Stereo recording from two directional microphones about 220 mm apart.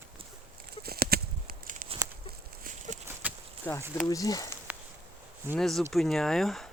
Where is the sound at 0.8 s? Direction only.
45° right (ahead or behind).